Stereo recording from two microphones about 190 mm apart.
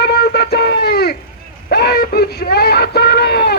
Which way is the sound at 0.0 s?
55° left (ahead or behind).